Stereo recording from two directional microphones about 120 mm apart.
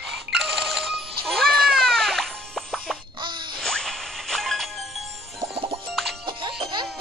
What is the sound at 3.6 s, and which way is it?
Music, 5° left (ahead or behind).